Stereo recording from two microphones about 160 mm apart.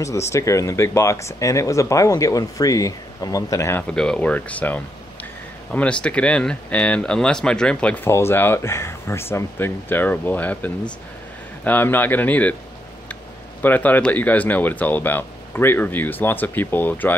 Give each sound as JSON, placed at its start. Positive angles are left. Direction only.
{"t": 0.0, "sound": "speech", "side_deg": 20}
{"t": 3.9, "sound": "speech", "side_deg": 5}